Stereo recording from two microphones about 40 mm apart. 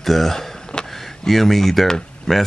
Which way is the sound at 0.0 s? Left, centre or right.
Centre.